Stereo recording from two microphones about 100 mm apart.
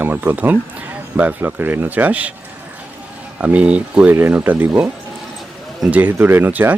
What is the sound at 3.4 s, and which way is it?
Speech, 15° right (ahead or behind).